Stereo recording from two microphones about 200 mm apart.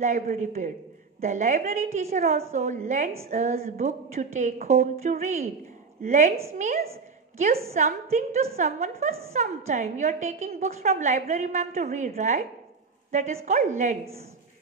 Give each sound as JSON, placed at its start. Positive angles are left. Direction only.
{"t": 0.0, "sound": "a woman's voice", "side_deg": -40}